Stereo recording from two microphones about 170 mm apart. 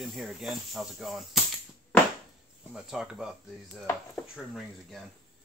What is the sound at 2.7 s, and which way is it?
Speech, 5° right (ahead or behind).